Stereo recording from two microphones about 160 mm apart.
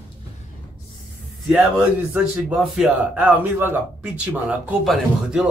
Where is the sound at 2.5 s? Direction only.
5° right (ahead or behind).